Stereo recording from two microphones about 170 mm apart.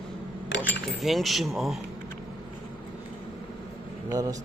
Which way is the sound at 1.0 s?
Centre (ahead or behind).